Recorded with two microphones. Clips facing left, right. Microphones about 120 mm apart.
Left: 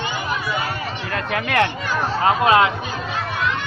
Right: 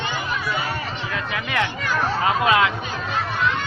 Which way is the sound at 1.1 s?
60° left (ahead or behind).